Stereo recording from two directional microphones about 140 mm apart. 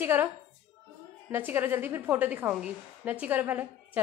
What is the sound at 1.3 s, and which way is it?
A woman's voice, 15° right (ahead or behind).